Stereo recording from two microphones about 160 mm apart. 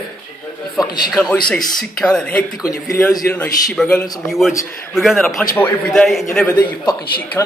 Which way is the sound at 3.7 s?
5° left (ahead or behind).